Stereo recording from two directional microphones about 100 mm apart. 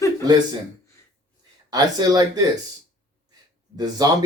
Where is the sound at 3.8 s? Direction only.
40° right (ahead or behind).